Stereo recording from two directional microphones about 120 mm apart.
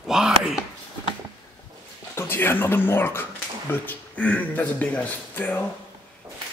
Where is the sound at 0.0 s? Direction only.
5° right (ahead or behind).